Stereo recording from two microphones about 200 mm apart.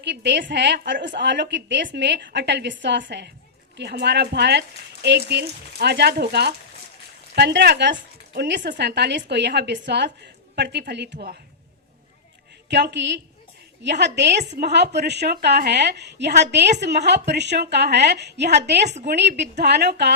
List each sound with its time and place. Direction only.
0.0 s a woman's voice: 60° right (ahead or behind)
12.6 s a woman's voice: 60° right (ahead or behind)